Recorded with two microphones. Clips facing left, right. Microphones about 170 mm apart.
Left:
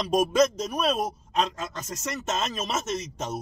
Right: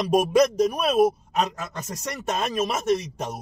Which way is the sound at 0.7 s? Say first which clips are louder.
Right 4 dB; 10° right (ahead or behind).